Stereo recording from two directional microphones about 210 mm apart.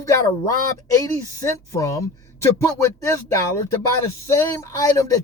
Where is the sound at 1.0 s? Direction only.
15° left (ahead or behind).